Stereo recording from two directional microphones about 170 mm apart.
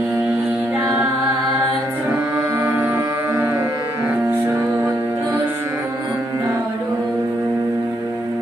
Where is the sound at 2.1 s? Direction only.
15° right (ahead or behind).